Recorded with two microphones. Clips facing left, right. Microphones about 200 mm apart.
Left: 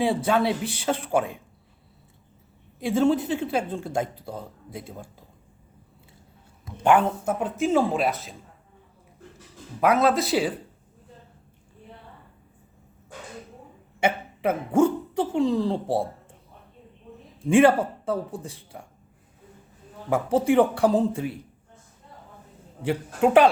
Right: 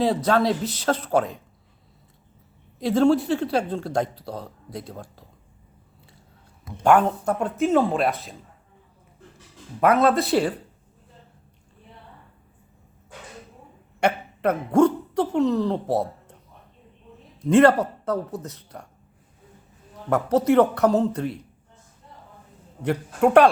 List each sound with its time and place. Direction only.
0.3 s speech: 10° left (ahead or behind)
2.8 s speech: 5° left (ahead or behind)
7.3 s speech: 5° left (ahead or behind)
9.8 s speech: centre (ahead or behind)
14.0 s speech: 5° left (ahead or behind)
17.7 s speech: 10° left (ahead or behind)
20.1 s speech: 10° left (ahead or behind)
22.8 s speech: 5° left (ahead or behind)